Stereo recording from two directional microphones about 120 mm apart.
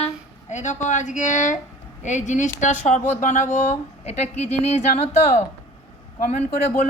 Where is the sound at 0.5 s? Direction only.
90° left.